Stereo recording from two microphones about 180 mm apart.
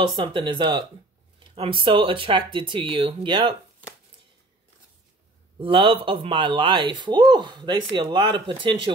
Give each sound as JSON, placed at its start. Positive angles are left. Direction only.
{"t": 0.0, "sound": "speech", "side_deg": -25}
{"t": 5.6, "sound": "speech", "side_deg": -30}